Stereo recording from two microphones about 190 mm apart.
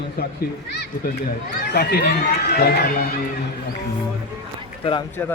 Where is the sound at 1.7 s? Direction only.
55° left (ahead or behind).